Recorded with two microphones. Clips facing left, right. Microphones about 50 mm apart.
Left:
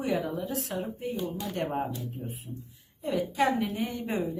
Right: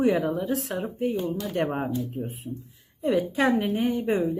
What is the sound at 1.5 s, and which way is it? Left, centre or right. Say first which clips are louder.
Speech: right 7 dB; right.